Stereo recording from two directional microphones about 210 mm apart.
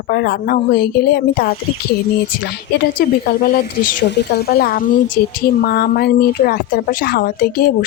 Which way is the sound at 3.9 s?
55° left (ahead or behind).